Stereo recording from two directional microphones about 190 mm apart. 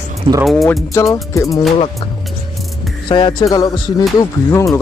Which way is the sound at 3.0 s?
25° left (ahead or behind).